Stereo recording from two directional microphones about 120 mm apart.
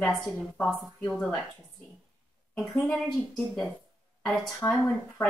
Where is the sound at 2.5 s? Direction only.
10° left (ahead or behind).